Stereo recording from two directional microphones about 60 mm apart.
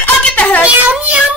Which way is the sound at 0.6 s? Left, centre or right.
Right.